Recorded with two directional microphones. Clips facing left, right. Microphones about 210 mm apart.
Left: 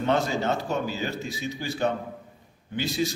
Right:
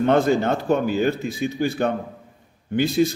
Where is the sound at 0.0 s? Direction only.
55° right (ahead or behind).